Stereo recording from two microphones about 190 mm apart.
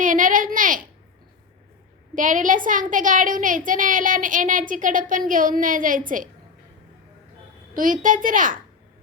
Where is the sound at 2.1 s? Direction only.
45° right (ahead or behind).